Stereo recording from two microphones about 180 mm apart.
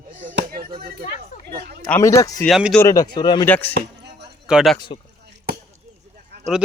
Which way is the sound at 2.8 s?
20° left (ahead or behind).